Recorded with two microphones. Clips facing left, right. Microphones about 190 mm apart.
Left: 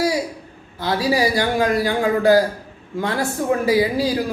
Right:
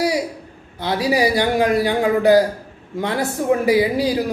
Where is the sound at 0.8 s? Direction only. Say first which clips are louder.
Right 1 dB; 20° right (ahead or behind).